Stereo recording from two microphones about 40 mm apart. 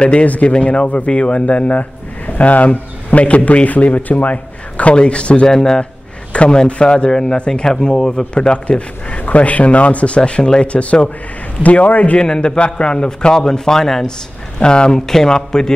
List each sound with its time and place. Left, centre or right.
0.0 s a man's voice: left
5.5 s speech: centre
6.3 s a man's voice: left
8.4 s speech: left
12.2 s a man's voice: left